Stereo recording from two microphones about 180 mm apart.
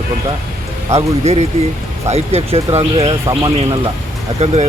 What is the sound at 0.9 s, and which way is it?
Speech, 35° right (ahead or behind).